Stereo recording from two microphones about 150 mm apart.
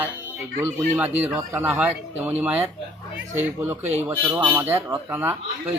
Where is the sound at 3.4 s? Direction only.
15° right (ahead or behind).